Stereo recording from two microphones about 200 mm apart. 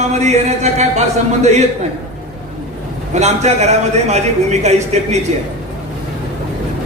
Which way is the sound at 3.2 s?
35° right (ahead or behind).